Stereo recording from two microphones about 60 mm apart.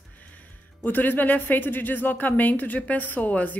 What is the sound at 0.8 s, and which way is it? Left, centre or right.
A woman's voice, left.